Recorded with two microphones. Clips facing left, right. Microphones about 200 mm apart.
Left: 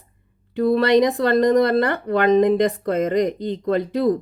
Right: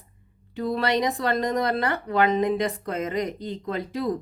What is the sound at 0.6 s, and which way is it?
A woman's voice, 60° left (ahead or behind).